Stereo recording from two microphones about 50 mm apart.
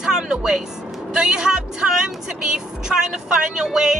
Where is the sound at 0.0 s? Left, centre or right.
Centre.